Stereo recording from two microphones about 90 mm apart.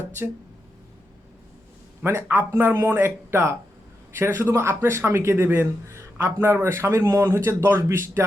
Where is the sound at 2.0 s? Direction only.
25° right (ahead or behind).